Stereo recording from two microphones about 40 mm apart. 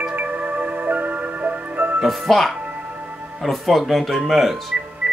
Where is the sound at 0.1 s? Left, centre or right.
Right.